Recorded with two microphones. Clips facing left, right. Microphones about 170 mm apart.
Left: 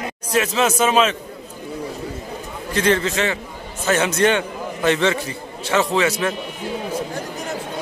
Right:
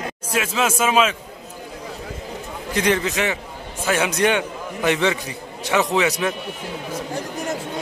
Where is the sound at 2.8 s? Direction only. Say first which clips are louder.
Left 2 dB; 15° right (ahead or behind).